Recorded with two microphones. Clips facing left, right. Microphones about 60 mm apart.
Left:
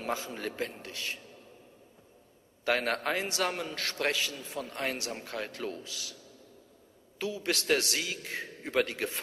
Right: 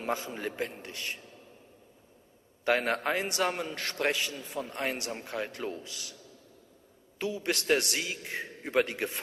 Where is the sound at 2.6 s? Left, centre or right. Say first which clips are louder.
Right 2 dB; centre.